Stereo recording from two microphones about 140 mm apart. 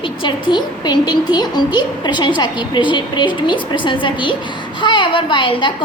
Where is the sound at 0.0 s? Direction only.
35° left (ahead or behind).